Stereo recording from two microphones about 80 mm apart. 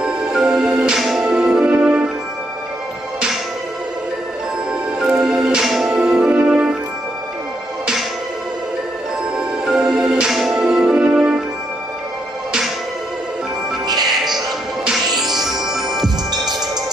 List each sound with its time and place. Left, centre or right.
0.0 s music: centre
5.0 s music: centre
9.7 s music: centre
13.8 s music: right
14.9 s music: centre